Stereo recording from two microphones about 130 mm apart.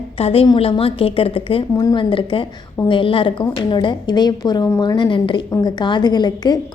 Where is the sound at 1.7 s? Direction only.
30° left (ahead or behind).